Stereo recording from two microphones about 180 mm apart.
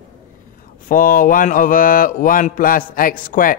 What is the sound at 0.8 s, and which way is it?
Speech, 50° left (ahead or behind).